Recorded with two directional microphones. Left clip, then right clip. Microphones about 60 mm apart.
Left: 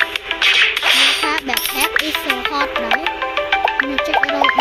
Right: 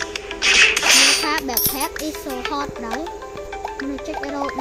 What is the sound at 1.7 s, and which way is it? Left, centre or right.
Music, left.